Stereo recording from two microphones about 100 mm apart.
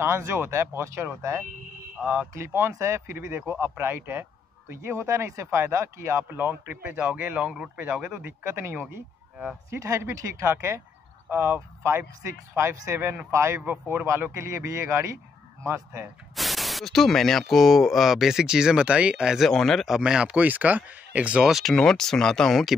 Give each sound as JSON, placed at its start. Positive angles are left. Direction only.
{"t": 0.0, "sound": "speech", "side_deg": -25}
{"t": 2.0, "sound": "speech", "side_deg": -10}
{"t": 2.3, "sound": "speech", "side_deg": -25}
{"t": 8.3, "sound": "speech", "side_deg": -25}
{"t": 16.3, "sound": "speech", "side_deg": 0}
{"t": 20.0, "sound": "speech", "side_deg": -10}